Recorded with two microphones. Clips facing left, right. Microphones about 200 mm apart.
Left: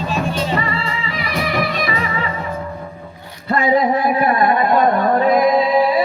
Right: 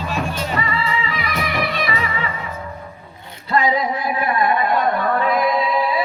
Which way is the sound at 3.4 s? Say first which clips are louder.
Left 3 dB; 50° left (ahead or behind).